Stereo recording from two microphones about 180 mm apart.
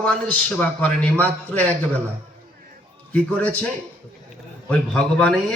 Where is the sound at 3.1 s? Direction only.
10° left (ahead or behind).